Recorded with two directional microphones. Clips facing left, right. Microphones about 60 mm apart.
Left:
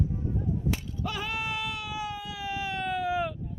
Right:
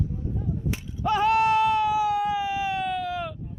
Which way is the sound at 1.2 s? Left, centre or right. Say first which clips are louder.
Right 17 dB; right.